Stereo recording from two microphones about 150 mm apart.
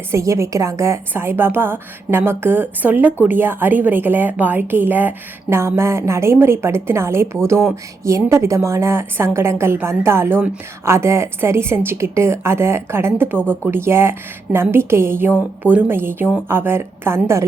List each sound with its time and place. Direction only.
0.1 s a woman's voice: 20° right (ahead or behind)